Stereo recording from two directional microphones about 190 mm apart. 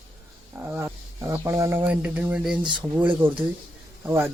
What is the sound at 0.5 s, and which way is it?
Speech, 10° right (ahead or behind).